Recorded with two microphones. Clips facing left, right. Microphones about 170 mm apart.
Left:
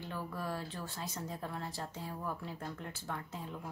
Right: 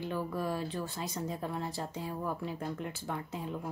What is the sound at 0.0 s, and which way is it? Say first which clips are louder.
Speech: right 6 dB; 15° right (ahead or behind).